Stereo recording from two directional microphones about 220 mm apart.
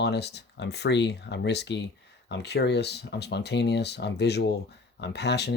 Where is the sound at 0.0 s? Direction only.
50° left (ahead or behind).